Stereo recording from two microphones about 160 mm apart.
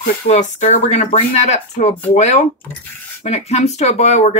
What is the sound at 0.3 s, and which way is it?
Speech, 45° left (ahead or behind).